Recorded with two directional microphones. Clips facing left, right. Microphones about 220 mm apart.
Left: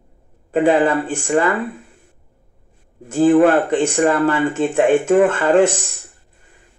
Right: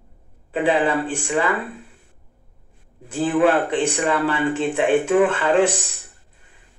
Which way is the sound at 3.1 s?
45° left (ahead or behind).